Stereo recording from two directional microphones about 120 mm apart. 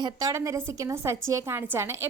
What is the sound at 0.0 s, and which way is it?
A woman's voice, 30° right (ahead or behind).